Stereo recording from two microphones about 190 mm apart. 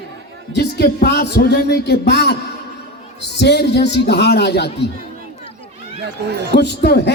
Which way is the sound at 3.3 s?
60° left (ahead or behind).